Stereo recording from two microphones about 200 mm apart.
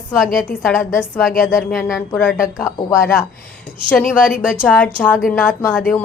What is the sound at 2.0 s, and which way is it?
A woman's voice, 10° left (ahead or behind).